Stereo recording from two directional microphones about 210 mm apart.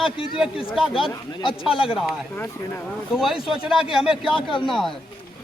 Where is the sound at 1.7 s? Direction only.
25° left (ahead or behind).